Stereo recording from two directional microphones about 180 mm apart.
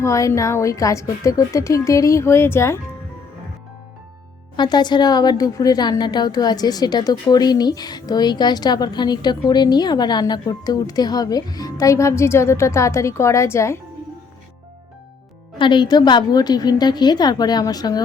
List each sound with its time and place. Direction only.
0.0 s a woman's voice: 15° left (ahead or behind)
4.5 s a woman's voice: 25° left (ahead or behind)
15.5 s a woman's voice: 25° left (ahead or behind)